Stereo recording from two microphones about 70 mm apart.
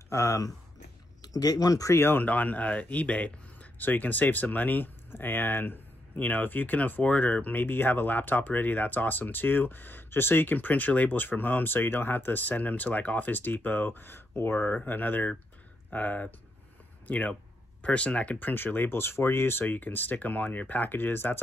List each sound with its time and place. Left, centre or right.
0.1 s speech: left
1.2 s speech: left
2.0 s speech: left